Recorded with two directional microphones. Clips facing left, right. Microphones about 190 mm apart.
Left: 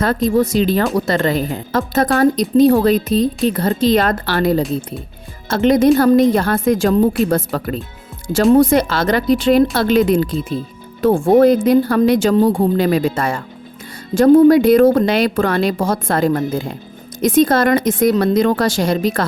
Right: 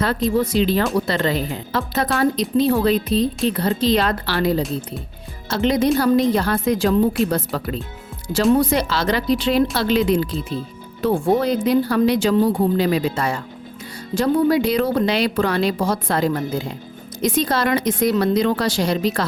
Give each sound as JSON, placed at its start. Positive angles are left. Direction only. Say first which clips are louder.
{"t": 0.0, "sound": "speech", "louder": "left 4 dB", "side_deg": 45}